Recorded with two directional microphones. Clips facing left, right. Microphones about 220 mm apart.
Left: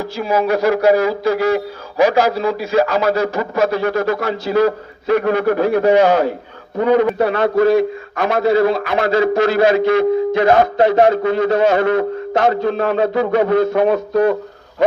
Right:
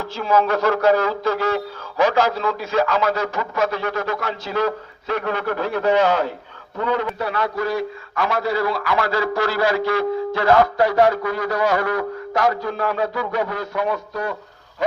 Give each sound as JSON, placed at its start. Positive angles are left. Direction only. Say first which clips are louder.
{"t": 0.0, "sound": "speech", "louder": "left 2 dB", "side_deg": 10}
{"t": 2.8, "sound": "speech", "louder": "left 4 dB", "side_deg": 40}
{"t": 4.3, "sound": "a man's voice", "louder": "left 8 dB", "side_deg": 10}